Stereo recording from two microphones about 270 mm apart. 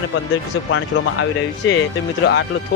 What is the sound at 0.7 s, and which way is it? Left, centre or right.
Speech, left.